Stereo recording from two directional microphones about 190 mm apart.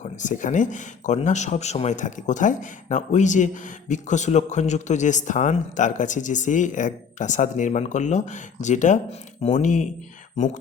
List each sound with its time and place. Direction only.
0.0 s speech: 40° left (ahead or behind)